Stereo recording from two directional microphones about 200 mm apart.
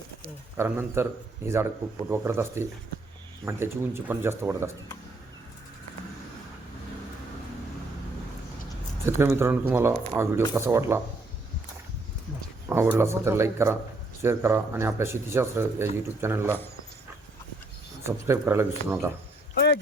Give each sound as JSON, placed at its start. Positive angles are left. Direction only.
{"t": 0.5, "sound": "speech", "side_deg": -10}
{"t": 9.0, "sound": "speech", "side_deg": -15}
{"t": 12.6, "sound": "speech", "side_deg": -10}
{"t": 18.0, "sound": "speech", "side_deg": -15}
{"t": 19.5, "sound": "a sound", "side_deg": 55}